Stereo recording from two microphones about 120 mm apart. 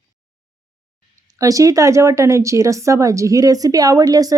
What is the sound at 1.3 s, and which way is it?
Speech, 30° right (ahead or behind).